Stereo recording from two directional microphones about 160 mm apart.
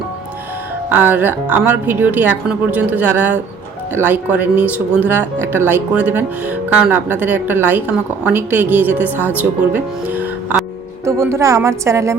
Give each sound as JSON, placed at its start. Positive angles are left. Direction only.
{"t": 0.9, "sound": "a woman's voice", "side_deg": -10}